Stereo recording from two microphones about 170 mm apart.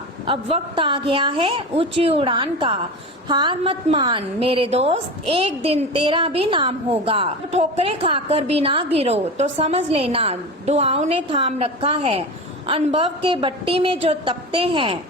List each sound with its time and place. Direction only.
0.3 s a woman's voice: 30° right (ahead or behind)